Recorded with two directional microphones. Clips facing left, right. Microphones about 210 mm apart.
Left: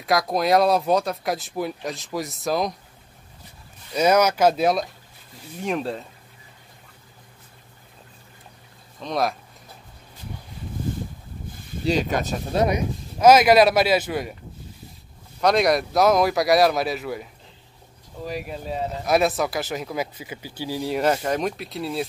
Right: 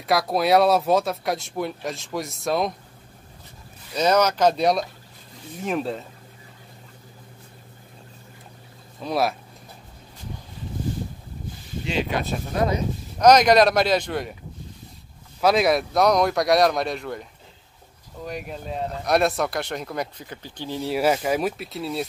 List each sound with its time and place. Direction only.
0.0 s speech: centre (ahead or behind)
3.9 s speech: 10° left (ahead or behind)
9.0 s speech: 5° right (ahead or behind)
11.8 s speech: 40° left (ahead or behind)
12.5 s speech: 15° left (ahead or behind)
15.4 s speech: centre (ahead or behind)